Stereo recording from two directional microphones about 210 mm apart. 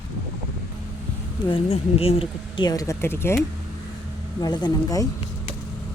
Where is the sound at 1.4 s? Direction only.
25° left (ahead or behind).